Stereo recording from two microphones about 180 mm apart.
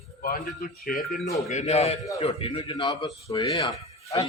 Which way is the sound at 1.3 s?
35° left (ahead or behind).